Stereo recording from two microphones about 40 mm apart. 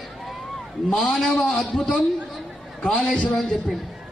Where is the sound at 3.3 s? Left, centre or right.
Centre.